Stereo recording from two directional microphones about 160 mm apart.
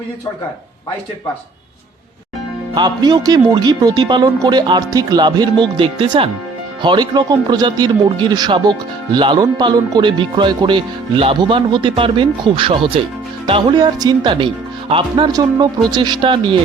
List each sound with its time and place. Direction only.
2.7 s speech: 25° right (ahead or behind)